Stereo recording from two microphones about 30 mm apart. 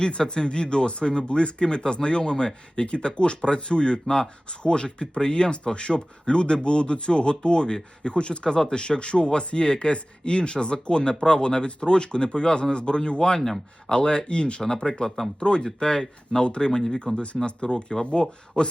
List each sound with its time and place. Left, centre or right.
0.0 s a man's voice: left
13.4 s speech: centre
13.9 s a man's voice: left